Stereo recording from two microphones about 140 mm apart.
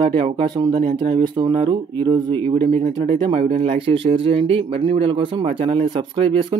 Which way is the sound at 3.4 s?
70° right (ahead or behind).